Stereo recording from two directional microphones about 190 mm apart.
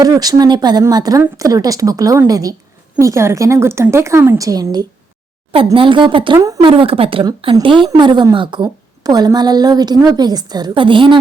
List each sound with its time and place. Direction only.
0.0 s a woman's voice: 20° right (ahead or behind)